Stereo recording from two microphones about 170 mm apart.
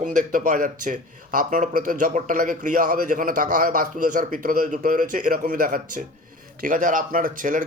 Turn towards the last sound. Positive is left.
turn(degrees=-50)  # may be behind; listen again after turning